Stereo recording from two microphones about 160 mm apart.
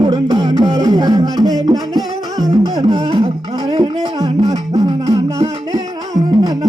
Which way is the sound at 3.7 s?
25° right (ahead or behind).